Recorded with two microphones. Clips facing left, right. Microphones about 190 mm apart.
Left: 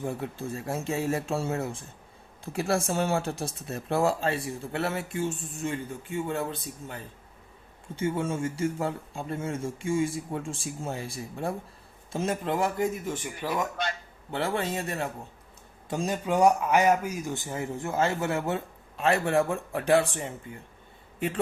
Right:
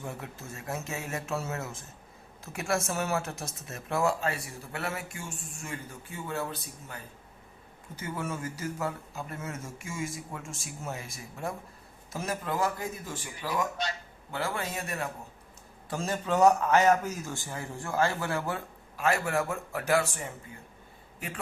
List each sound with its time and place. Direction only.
0.0 s speech: 30° left (ahead or behind)
13.8 s speech: 55° left (ahead or behind)
14.3 s speech: 25° left (ahead or behind)
15.9 s speech: 15° left (ahead or behind); by 20.0 s 30° left (ahead or behind)